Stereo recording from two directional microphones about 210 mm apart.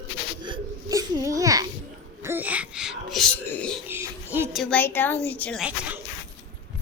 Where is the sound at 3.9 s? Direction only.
10° right (ahead or behind); by 5.6 s 5° left (ahead or behind).